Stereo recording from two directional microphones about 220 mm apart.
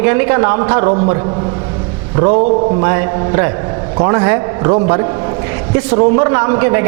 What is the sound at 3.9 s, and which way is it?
A man's voice, 25° right (ahead or behind).